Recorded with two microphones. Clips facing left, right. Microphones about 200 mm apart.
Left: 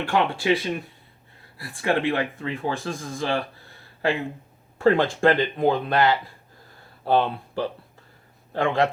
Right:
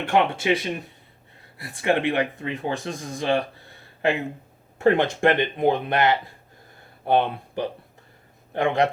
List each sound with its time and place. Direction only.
0.0 s speech: 20° right (ahead or behind)